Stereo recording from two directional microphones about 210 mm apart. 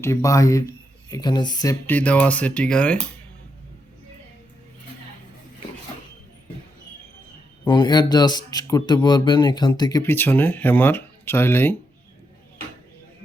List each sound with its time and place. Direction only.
0.0 s speech: 15° left (ahead or behind)
1.9 s speech: 5° left (ahead or behind)
7.6 s speech: 20° left (ahead or behind)